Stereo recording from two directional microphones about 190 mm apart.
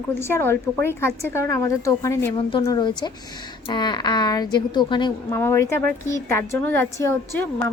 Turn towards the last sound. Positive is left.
turn(degrees=15)  # may be behind; listen again after turning